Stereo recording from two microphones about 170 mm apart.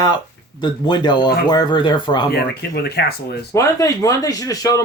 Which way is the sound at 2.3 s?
70° left (ahead or behind).